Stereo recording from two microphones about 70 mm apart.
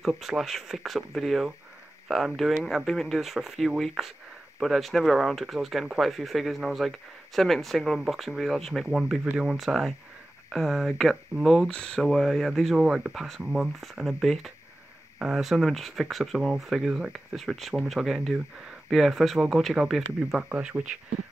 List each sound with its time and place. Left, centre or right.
0.0 s speech: centre
8.8 s speech: centre
11.7 s speech: centre
12.1 s speech: centre
12.7 s speech: centre
13.7 s speech: centre
17.4 s speech: centre
20.3 s speech: centre